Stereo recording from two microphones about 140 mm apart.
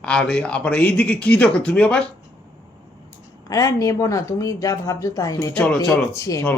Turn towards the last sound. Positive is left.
turn(degrees=20)  # may be behind; listen again after turning